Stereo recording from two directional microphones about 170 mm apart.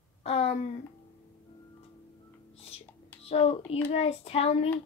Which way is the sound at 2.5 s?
35° left (ahead or behind).